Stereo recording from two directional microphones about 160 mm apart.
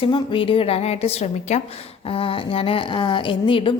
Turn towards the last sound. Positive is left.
turn(degrees=35)  # may be behind; listen again after turning